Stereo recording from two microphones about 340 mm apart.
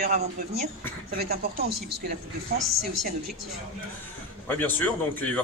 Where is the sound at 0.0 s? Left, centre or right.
Right.